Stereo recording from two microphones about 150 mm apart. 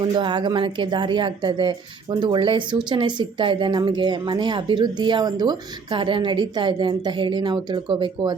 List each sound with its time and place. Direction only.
0.0 s a woman's voice: 30° right (ahead or behind)